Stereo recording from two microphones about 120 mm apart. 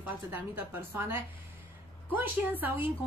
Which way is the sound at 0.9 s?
20° right (ahead or behind).